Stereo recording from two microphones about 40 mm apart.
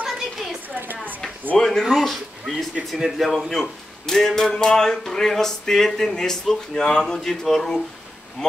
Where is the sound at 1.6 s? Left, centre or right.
Centre.